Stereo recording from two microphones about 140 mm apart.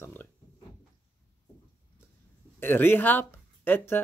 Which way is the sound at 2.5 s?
15° left (ahead or behind).